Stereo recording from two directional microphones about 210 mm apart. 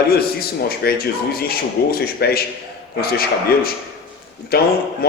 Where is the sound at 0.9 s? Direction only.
45° left (ahead or behind).